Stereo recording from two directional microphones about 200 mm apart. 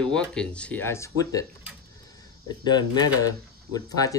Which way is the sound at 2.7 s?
20° left (ahead or behind).